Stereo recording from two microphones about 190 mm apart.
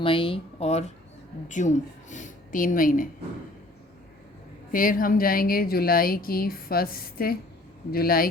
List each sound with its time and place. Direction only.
0.0 s speech: 30° left (ahead or behind); by 3.1 s 45° left (ahead or behind)
4.7 s a woman's voice: 45° left (ahead or behind)